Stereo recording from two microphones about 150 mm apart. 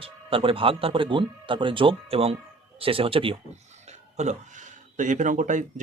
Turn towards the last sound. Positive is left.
turn(degrees=-55)  # may be behind; listen again after turning